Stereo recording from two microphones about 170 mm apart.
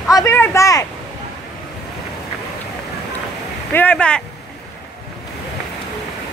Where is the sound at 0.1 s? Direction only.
15° left (ahead or behind).